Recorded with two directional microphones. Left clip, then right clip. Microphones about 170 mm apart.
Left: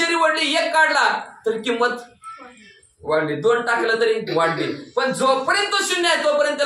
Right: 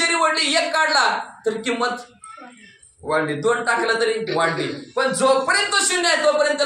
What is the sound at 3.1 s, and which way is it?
A man's voice, 20° right (ahead or behind).